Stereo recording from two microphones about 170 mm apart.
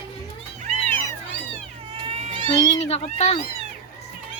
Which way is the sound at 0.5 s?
45° right (ahead or behind).